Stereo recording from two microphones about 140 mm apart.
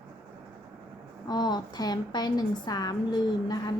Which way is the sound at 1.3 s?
30° left (ahead or behind).